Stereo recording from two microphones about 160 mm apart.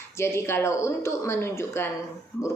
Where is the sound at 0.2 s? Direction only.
15° left (ahead or behind).